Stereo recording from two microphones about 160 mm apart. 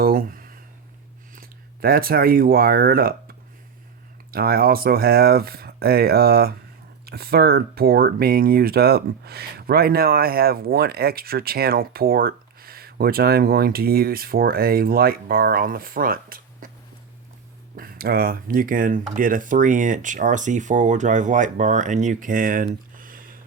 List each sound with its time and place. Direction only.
0.0 s a sound: 65° right (ahead or behind)
1.4 s speech: 70° right (ahead or behind)
17.7 s speech: 70° right (ahead or behind)